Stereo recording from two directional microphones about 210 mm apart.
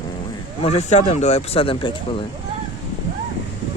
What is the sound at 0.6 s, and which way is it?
Speech, 30° left (ahead or behind).